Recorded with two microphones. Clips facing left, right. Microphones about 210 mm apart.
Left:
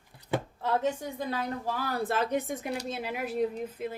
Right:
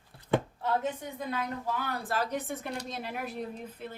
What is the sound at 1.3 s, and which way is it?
Speech, 35° left (ahead or behind).